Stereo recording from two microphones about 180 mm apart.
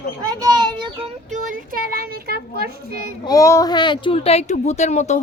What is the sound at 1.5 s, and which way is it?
A child's voice, 50° right (ahead or behind).